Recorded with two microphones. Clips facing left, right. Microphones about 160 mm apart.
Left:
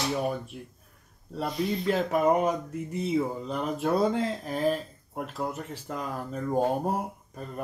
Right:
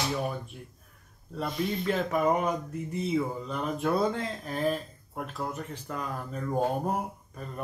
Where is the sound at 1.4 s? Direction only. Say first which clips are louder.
Left 2 dB; 35° left (ahead or behind).